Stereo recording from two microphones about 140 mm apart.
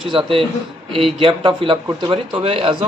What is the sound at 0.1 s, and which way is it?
Speech, 40° right (ahead or behind).